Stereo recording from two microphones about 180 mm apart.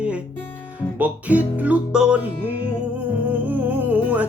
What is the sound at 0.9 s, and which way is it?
Music, 10° right (ahead or behind).